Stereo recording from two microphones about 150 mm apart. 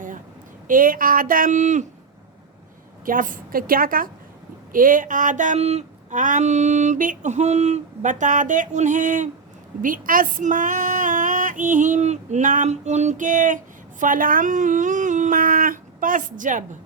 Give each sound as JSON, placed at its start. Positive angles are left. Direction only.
{"t": 0.7, "sound": "speech", "side_deg": -65}
{"t": 3.1, "sound": "speech", "side_deg": -65}